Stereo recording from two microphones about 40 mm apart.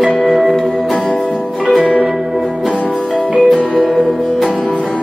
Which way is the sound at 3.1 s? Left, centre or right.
Left.